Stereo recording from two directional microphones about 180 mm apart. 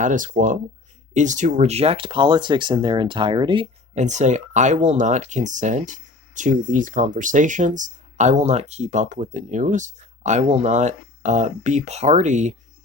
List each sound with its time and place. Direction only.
0.0 s speech: 45° right (ahead or behind); by 3.7 s 25° right (ahead or behind)
3.9 s speech: 40° right (ahead or behind)